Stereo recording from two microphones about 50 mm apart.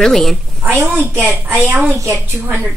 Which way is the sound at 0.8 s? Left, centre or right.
Right.